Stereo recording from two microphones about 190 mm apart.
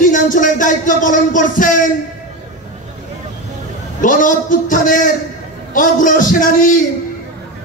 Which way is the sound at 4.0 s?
45° left (ahead or behind).